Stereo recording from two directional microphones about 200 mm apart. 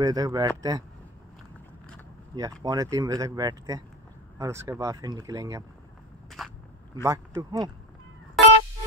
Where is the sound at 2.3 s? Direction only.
20° right (ahead or behind).